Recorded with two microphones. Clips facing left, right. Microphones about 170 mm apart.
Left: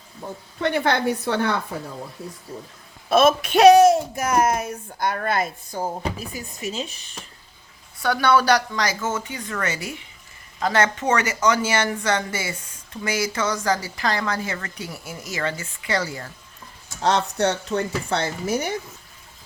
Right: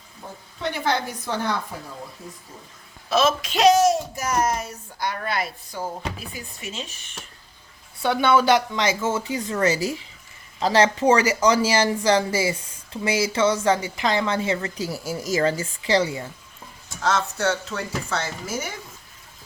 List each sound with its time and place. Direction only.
0.6 s speech: 60° left (ahead or behind)
3.1 s speech: 55° left (ahead or behind); by 7.2 s 35° left (ahead or behind)
8.0 s a woman's voice: 25° right (ahead or behind)
17.0 s speech: 20° left (ahead or behind)
18.2 s speech: 65° left (ahead or behind)